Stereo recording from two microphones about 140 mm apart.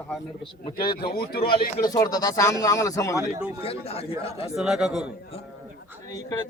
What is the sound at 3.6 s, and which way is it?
Speech, 45° left (ahead or behind).